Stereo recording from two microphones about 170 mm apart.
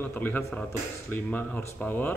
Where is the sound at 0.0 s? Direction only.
10° left (ahead or behind).